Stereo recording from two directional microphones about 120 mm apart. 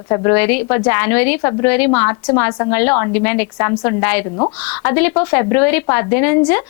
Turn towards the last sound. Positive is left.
turn(degrees=20)  # may be behind; listen again after turning